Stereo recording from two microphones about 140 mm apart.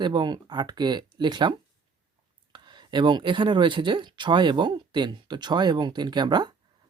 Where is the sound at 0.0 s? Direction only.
30° right (ahead or behind).